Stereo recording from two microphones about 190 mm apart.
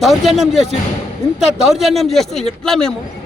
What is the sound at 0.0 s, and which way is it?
A man's voice, centre (ahead or behind).